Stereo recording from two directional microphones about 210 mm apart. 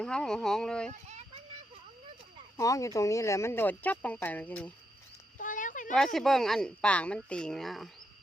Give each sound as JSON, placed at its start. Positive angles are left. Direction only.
{"t": 0.0, "sound": "speech", "side_deg": 5}
{"t": 2.6, "sound": "speech", "side_deg": 15}
{"t": 5.4, "sound": "a sound", "side_deg": 40}
{"t": 6.1, "sound": "speech", "side_deg": 0}